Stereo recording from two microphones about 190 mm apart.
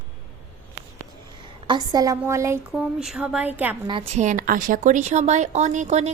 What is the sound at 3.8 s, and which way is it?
A woman's voice, 30° right (ahead or behind).